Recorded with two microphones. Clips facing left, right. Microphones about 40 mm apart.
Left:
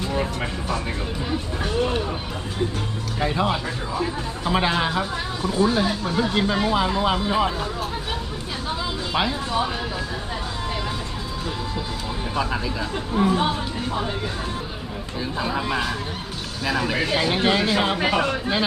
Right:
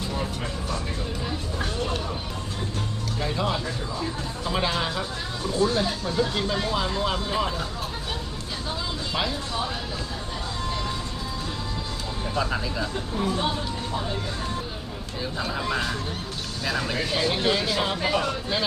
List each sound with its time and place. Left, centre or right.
3.2 s speech: left
9.1 s speech: left
12.3 s speech: centre
12.9 s speech: left
15.4 s speech: centre
17.0 s speech: left